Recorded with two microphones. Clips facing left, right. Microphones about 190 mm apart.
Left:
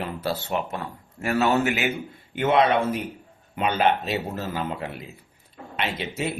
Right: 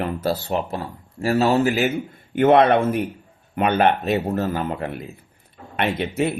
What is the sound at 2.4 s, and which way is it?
A man's voice, 55° right (ahead or behind).